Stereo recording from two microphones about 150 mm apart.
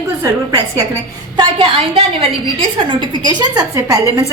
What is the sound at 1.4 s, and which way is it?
A woman's voice, 35° right (ahead or behind).